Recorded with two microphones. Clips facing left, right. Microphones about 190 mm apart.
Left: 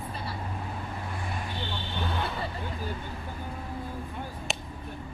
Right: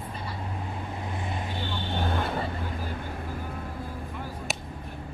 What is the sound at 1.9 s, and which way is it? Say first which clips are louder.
Vehicle: right 4 dB; 50° right (ahead or behind).